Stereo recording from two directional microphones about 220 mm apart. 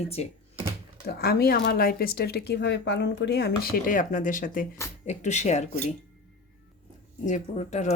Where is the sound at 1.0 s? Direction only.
45° left (ahead or behind).